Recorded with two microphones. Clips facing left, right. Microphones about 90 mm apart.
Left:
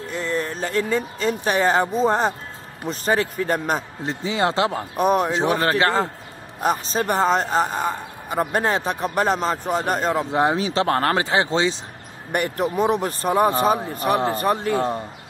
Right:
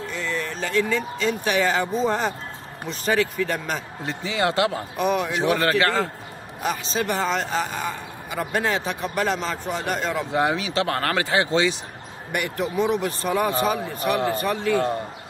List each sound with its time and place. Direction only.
0.1 s a man's voice: 40° left (ahead or behind)
4.0 s speech: 30° left (ahead or behind)
4.9 s a man's voice: 40° left (ahead or behind)
6.6 s a man's voice: 45° left (ahead or behind)
12.3 s a man's voice: 40° left (ahead or behind)